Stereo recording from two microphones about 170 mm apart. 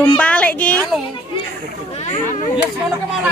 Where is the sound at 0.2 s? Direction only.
10° left (ahead or behind).